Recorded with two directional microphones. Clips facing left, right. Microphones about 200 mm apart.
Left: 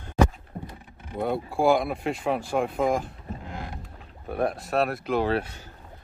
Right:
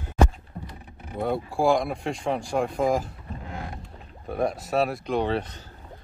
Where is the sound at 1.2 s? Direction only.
Centre (ahead or behind).